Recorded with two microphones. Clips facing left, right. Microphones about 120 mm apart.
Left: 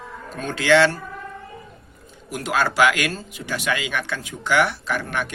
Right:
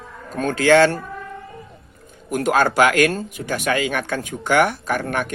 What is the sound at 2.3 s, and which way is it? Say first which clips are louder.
Speech: right 5 dB; 45° right (ahead or behind).